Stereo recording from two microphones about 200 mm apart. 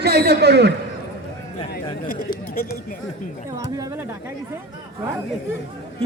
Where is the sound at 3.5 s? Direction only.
15° right (ahead or behind).